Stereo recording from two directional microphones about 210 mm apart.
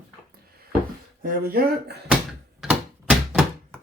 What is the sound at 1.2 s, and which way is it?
Speech, 45° right (ahead or behind).